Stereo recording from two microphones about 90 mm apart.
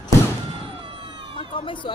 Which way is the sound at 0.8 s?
65° right (ahead or behind).